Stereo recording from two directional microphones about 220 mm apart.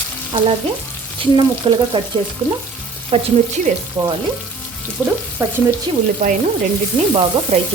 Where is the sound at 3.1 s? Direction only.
25° right (ahead or behind).